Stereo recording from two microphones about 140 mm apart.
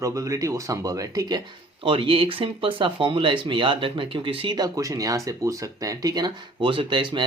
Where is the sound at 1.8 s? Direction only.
35° right (ahead or behind).